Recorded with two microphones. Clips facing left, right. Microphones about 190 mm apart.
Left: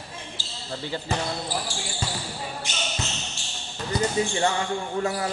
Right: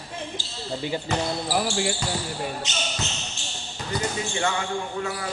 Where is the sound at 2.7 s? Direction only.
20° right (ahead or behind).